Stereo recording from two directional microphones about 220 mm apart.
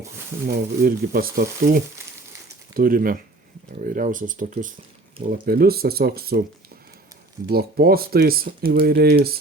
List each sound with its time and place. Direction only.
0.4 s speech: 40° right (ahead or behind)
7.4 s speech: 45° right (ahead or behind)